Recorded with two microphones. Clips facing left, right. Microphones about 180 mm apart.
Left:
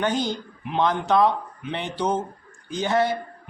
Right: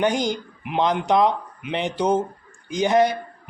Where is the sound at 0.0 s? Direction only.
15° right (ahead or behind).